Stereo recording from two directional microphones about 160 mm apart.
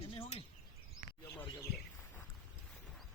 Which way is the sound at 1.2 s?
15° left (ahead or behind).